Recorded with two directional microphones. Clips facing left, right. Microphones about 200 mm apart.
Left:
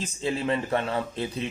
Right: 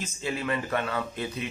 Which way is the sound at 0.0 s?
30° left (ahead or behind).